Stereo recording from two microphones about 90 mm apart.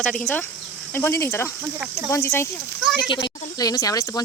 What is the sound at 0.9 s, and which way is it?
Speech, 25° left (ahead or behind).